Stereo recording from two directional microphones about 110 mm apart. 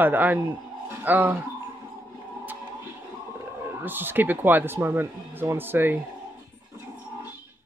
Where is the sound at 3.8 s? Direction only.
20° right (ahead or behind).